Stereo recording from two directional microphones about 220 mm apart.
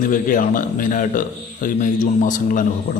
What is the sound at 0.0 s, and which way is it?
A man's voice, 35° left (ahead or behind).